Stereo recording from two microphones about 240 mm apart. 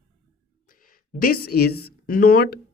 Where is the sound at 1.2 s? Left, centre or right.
Left.